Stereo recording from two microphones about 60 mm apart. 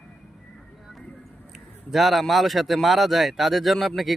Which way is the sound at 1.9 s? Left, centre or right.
Centre.